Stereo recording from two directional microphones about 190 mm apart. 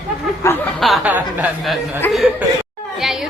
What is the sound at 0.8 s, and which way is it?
A woman's voice, 5° right (ahead or behind).